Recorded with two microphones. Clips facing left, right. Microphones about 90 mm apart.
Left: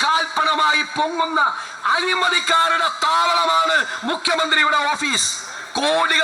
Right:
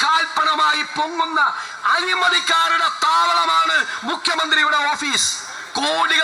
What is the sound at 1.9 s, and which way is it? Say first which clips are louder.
A man's voice: right 1 dB; 20° right (ahead or behind).